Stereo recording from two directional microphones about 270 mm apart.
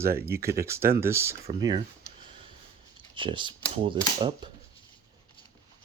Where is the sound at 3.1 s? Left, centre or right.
Centre.